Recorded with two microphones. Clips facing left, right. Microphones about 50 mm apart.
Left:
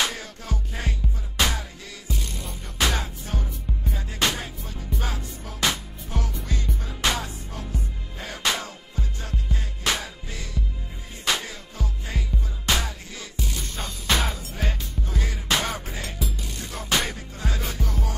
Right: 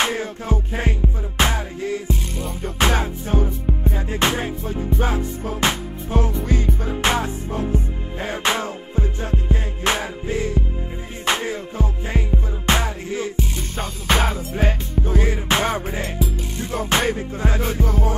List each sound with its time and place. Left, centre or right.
0.0 s music: right
6.4 s music: right
13.7 s music: centre
15.0 s music: right